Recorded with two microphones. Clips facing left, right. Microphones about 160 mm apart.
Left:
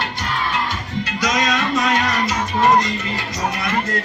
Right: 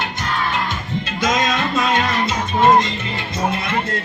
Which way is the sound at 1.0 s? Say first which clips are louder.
Right 1 dB; 25° right (ahead or behind).